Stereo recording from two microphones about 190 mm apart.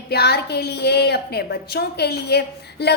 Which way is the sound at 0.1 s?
60° left (ahead or behind).